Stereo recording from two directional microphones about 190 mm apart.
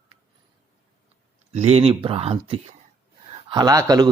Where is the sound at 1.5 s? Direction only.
35° right (ahead or behind).